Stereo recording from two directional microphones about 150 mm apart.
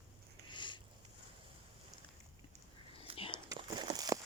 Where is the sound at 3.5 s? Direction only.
30° right (ahead or behind).